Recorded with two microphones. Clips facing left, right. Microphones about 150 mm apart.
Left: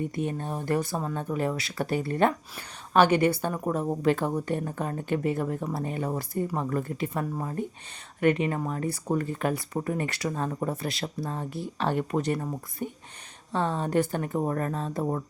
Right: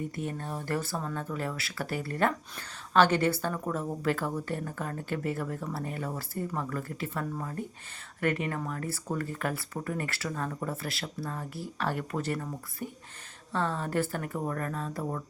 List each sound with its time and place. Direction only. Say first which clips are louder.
0.0 s speech: left 5 dB; 20° left (ahead or behind)